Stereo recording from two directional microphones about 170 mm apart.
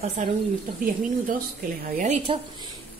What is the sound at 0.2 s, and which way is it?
Speech, 45° right (ahead or behind).